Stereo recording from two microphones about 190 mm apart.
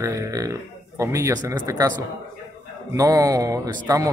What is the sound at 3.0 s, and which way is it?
Speech, 15° right (ahead or behind).